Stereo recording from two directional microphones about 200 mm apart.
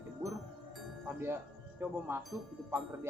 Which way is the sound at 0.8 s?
Centre (ahead or behind).